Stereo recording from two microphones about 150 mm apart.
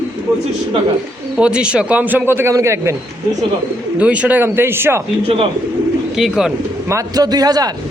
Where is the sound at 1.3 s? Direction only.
5° right (ahead or behind).